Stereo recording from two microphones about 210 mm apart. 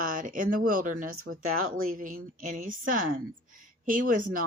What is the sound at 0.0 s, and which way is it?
Speech, 40° right (ahead or behind).